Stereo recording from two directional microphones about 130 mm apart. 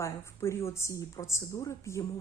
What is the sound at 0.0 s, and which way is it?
A woman's voice, 20° left (ahead or behind).